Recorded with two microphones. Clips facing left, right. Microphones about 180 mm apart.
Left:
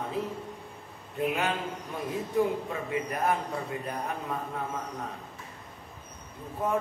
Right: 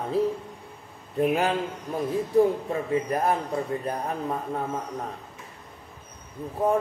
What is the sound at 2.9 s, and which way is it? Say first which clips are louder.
Speech: right 4 dB; 35° right (ahead or behind).